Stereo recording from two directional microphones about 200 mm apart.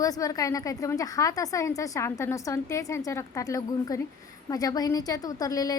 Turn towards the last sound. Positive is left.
turn(degrees=20)  # may be behind; listen again after turning